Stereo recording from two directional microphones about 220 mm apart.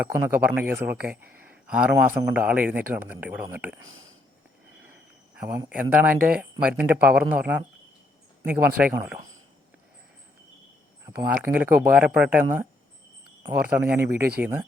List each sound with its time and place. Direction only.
0.0 s a man's voice: 10° right (ahead or behind)
3.8 s speech: 65° right (ahead or behind)
5.3 s a man's voice: 5° right (ahead or behind)
11.0 s a man's voice: 10° right (ahead or behind)